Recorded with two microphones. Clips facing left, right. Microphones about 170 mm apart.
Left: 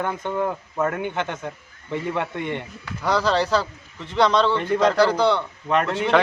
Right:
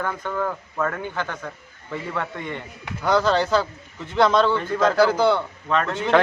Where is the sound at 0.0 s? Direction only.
20° left (ahead or behind).